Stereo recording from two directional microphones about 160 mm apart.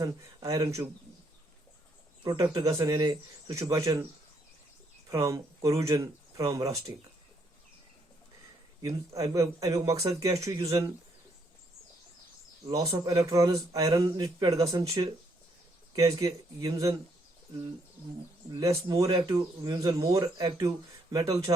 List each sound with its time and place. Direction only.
0.0 s speech: 20° right (ahead or behind)
2.2 s speech: 25° right (ahead or behind)
5.0 s speech: 20° right (ahead or behind)
8.8 s speech: 20° right (ahead or behind)
12.6 s speech: 20° right (ahead or behind)
16.2 s speech: 20° right (ahead or behind)
18.6 s speech: 20° right (ahead or behind)